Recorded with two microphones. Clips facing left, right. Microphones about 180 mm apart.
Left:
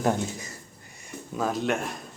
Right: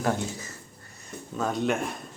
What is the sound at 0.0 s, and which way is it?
Speech, 20° left (ahead or behind).